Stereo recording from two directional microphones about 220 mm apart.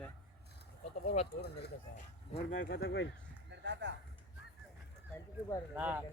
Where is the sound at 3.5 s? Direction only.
55° right (ahead or behind).